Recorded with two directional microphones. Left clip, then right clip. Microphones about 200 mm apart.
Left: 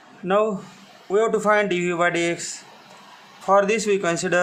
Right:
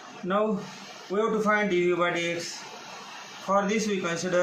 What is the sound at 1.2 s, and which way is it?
A man's voice, 65° left (ahead or behind).